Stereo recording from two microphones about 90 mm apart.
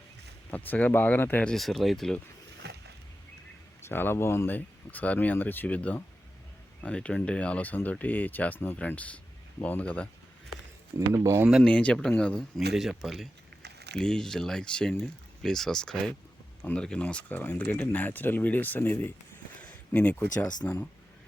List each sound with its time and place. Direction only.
0.5 s speech: 20° left (ahead or behind)
1.5 s speech: centre (ahead or behind)
3.8 s speech: 25° left (ahead or behind)
10.9 s speech: 35° right (ahead or behind)
11.6 s speech: 15° left (ahead or behind)
12.5 s speech: 5° right (ahead or behind); by 20.5 s 15° left (ahead or behind)